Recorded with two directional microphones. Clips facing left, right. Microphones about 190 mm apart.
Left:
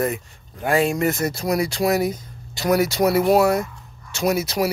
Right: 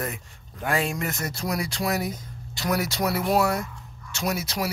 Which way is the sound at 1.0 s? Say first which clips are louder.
Left 8 dB; 5° left (ahead or behind).